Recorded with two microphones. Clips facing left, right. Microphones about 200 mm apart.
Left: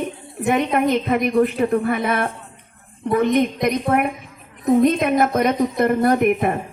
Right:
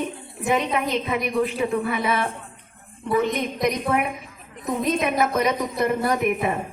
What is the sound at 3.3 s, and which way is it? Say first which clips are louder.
A woman's voice: left 5 dB; 55° left (ahead or behind).